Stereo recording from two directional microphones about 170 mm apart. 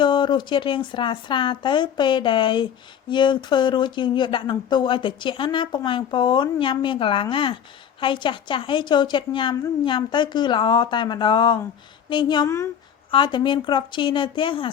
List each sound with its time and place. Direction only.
0.0 s speech: 25° left (ahead or behind)